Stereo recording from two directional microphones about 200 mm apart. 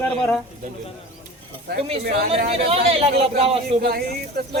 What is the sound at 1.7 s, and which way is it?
Speech, 55° right (ahead or behind).